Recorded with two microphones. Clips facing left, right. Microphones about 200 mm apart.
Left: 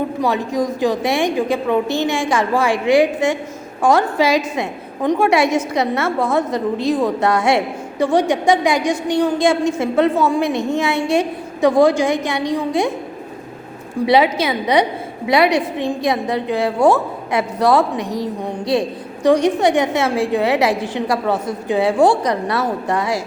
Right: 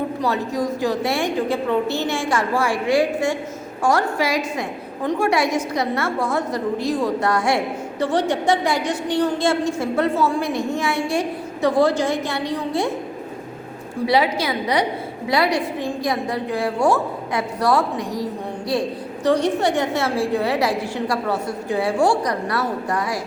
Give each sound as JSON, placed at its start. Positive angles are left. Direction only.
{"t": 0.2, "sound": "a woman's voice", "side_deg": 15}
{"t": 14.1, "sound": "a woman's voice", "side_deg": 20}